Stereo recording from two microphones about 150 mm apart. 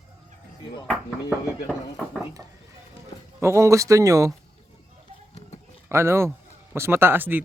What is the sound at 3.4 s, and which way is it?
Speech, 20° right (ahead or behind).